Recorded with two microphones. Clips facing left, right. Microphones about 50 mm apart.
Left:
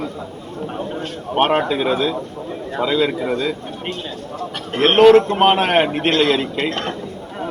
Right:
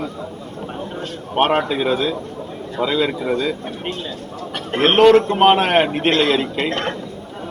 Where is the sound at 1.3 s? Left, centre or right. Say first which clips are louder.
Left 1 dB; centre.